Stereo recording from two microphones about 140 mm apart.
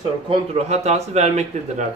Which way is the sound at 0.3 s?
45° right (ahead or behind).